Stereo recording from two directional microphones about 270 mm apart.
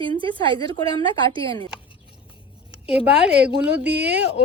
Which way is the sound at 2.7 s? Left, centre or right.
Centre.